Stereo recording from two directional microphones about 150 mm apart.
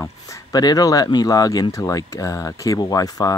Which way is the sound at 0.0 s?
25° left (ahead or behind).